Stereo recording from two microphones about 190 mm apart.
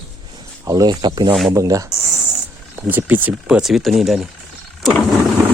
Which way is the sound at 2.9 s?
10° right (ahead or behind).